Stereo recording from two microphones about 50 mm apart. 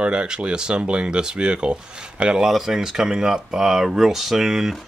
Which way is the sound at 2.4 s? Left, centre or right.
Centre.